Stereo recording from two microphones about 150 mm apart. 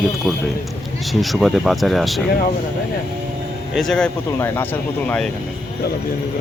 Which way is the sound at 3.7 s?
5° left (ahead or behind).